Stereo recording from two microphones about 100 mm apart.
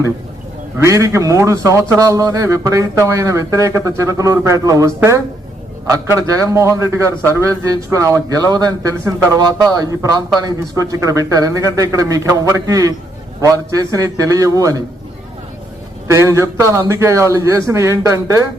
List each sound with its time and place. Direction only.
0.8 s a man's voice: 30° right (ahead or behind)
16.0 s a man's voice: 30° right (ahead or behind)